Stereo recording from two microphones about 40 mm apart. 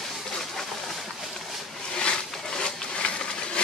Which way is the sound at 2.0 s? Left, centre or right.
Left.